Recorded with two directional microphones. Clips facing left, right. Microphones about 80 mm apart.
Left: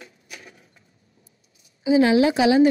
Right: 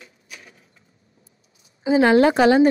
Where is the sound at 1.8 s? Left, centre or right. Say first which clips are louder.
Right 2 dB; right.